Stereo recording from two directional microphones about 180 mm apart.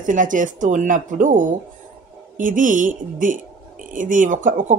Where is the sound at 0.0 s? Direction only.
45° right (ahead or behind).